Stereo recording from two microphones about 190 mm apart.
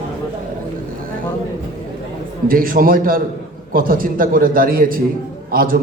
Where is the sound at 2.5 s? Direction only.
50° right (ahead or behind).